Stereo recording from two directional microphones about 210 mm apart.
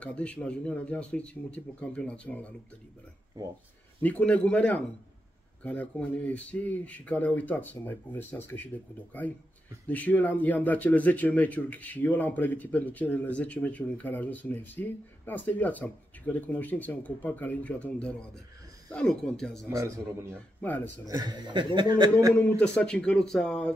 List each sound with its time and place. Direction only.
0.0 s speech: 5° left (ahead or behind)
4.0 s speech: 5° left (ahead or behind)
9.8 s speech: 10° left (ahead or behind)
19.7 s a man's voice: 15° right (ahead or behind)
22.3 s speech: 10° left (ahead or behind)